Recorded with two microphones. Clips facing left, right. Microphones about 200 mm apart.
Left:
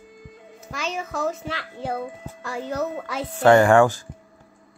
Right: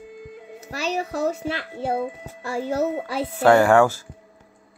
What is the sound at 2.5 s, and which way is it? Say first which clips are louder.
Speech: right 4 dB; 35° right (ahead or behind).